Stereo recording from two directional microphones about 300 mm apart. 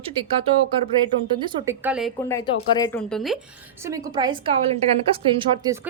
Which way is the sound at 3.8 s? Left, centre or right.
Centre.